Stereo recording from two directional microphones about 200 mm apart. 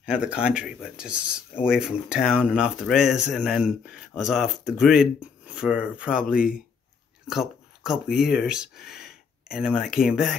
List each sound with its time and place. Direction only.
0.0 s speech: 5° right (ahead or behind)
6.1 s speech: 45° left (ahead or behind)
7.2 s speech: centre (ahead or behind)